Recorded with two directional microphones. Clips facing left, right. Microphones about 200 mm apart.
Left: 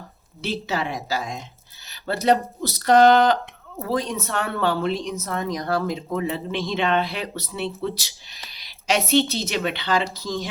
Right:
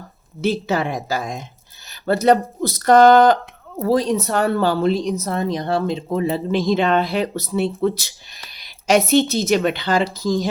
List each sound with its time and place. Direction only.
0.4 s speech: 50° right (ahead or behind)
3.8 s speech: 35° right (ahead or behind)